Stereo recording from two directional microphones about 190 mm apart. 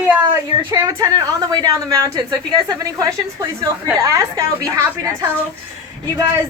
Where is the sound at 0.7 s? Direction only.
15° right (ahead or behind).